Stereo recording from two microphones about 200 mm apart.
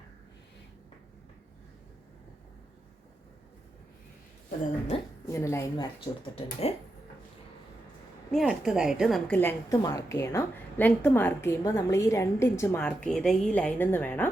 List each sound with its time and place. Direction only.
4.9 s a woman's voice: 30° left (ahead or behind)
5.3 s a woman's voice: 15° left (ahead or behind)
6.3 s speech: 30° left (ahead or behind)
8.3 s a woman's voice: centre (ahead or behind)